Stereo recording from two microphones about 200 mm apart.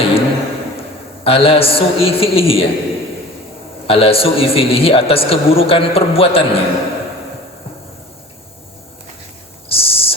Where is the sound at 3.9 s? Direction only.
30° left (ahead or behind).